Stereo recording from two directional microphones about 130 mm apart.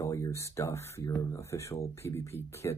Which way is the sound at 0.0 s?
20° left (ahead or behind).